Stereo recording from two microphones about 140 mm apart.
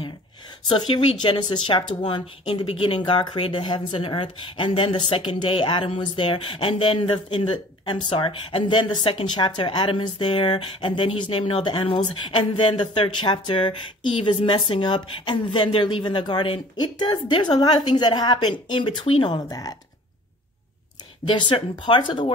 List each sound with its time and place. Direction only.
0.7 s speech: 30° left (ahead or behind)
21.3 s speech: 35° left (ahead or behind)